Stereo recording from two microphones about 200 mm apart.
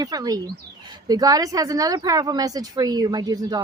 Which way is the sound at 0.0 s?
20° right (ahead or behind).